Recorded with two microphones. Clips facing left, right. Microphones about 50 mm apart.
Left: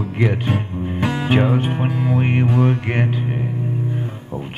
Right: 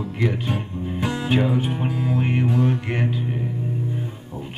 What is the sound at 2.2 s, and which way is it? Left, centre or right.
Music, left.